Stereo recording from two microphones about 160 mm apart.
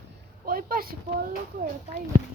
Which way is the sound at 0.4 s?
65° right (ahead or behind).